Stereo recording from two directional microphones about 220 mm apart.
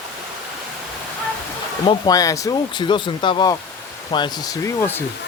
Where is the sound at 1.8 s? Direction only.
20° left (ahead or behind).